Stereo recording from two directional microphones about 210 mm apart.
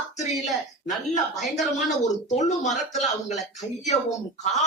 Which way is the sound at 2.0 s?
35° left (ahead or behind).